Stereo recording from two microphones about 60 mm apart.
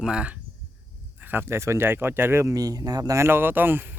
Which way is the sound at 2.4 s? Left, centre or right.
Right.